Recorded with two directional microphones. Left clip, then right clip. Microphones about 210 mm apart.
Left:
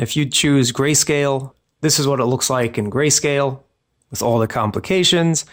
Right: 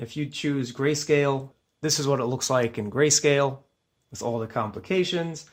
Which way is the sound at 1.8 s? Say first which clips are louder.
Left 7 dB; 15° left (ahead or behind).